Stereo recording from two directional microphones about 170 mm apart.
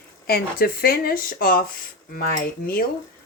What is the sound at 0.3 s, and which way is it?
Speech, 65° left (ahead or behind).